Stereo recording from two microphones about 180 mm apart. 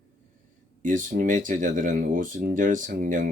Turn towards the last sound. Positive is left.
turn(degrees=-45)  # may be behind; listen again after turning